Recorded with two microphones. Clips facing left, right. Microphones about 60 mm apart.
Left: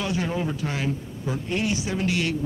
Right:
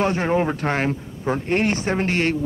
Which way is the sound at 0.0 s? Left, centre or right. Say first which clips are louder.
Right 7 dB; right.